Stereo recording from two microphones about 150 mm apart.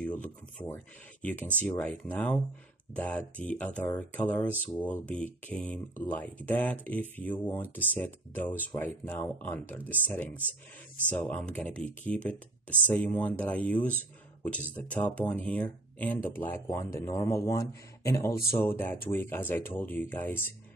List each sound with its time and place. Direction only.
0.0 s speech: 10° left (ahead or behind)